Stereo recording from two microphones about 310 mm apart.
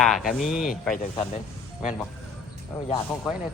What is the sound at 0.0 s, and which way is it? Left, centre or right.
Speech, centre.